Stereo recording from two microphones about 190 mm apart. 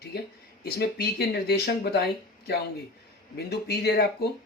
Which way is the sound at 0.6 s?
55° left (ahead or behind).